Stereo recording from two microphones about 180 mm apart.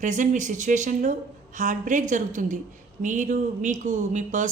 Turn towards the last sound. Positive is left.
turn(degrees=-45)  # may be behind; listen again after turning